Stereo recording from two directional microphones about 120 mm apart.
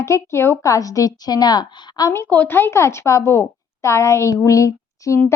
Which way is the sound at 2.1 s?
15° left (ahead or behind).